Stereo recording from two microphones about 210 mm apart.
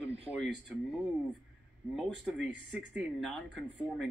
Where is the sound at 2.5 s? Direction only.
60° right (ahead or behind).